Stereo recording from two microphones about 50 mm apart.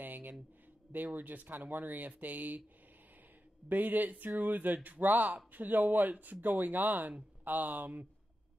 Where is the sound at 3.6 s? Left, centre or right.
Right.